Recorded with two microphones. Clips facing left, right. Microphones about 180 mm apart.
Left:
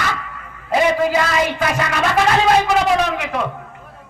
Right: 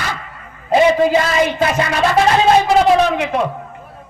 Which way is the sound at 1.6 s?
30° right (ahead or behind).